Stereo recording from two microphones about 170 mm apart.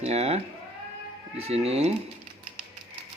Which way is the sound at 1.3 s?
35° right (ahead or behind).